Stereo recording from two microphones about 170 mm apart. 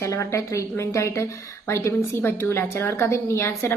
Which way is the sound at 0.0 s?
15° left (ahead or behind).